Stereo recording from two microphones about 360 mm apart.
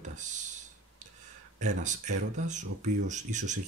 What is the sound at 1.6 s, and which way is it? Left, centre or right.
Speech, centre.